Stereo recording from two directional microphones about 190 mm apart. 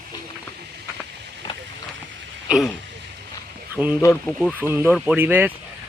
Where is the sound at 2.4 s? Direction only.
Centre (ahead or behind).